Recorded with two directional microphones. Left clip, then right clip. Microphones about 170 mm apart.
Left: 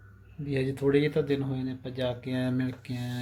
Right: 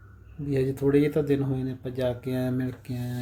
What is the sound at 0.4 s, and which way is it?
Speech, 10° right (ahead or behind).